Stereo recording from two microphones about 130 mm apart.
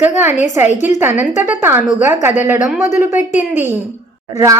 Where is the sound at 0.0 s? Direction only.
15° right (ahead or behind).